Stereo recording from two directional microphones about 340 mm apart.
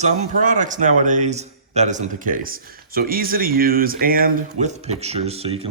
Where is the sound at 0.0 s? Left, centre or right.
Centre.